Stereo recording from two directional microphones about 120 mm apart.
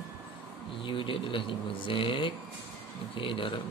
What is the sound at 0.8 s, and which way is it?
Speech, 45° left (ahead or behind).